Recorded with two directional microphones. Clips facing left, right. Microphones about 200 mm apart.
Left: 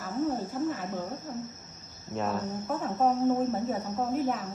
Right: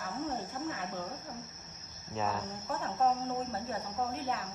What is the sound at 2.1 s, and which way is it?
Speech, centre (ahead or behind).